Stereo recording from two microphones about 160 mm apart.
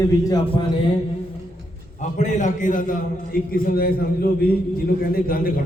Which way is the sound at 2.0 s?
50° left (ahead or behind).